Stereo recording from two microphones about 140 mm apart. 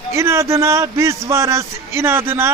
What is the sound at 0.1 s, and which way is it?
A man's voice, 20° right (ahead or behind).